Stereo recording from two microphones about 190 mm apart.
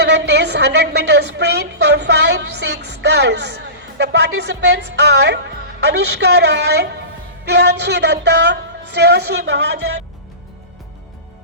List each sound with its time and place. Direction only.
0.0 s a woman's voice: 65° right (ahead or behind)